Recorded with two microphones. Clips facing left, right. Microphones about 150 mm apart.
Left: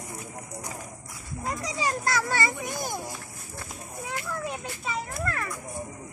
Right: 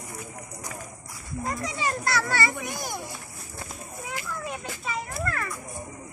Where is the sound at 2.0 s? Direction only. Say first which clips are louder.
Right 2 dB; 20° left (ahead or behind).